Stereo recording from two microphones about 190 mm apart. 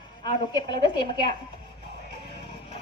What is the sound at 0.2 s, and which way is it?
A woman's voice, 25° left (ahead or behind).